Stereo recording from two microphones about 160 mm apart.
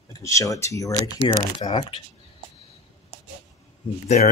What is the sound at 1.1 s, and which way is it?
Speech, 35° left (ahead or behind).